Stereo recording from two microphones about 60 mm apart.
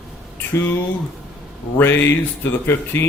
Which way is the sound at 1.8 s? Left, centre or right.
Left.